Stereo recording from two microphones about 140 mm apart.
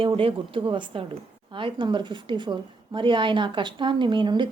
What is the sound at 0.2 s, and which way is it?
Speech, 40° right (ahead or behind).